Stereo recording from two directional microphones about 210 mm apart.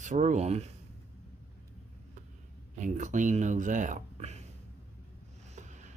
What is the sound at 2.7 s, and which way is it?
Speech, 35° right (ahead or behind).